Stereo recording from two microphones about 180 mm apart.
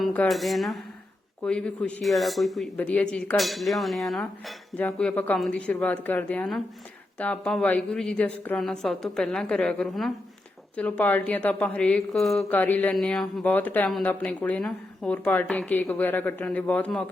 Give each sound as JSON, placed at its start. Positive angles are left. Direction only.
{"t": 0.0, "sound": "a man's voice", "side_deg": 5}